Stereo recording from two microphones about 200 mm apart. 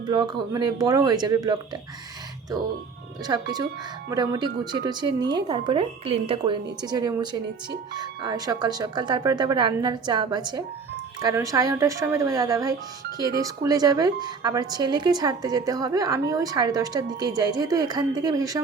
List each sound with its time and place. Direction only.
0.1 s a woman's voice: 20° right (ahead or behind)
3.2 s a woman's voice: 20° right (ahead or behind)